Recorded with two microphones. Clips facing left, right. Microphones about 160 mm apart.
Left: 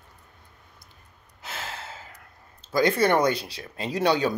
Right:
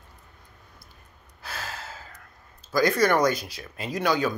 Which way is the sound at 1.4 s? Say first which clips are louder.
Even; 25° left (ahead or behind).